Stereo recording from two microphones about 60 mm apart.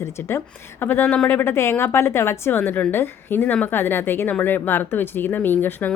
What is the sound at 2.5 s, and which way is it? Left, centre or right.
Speech, left.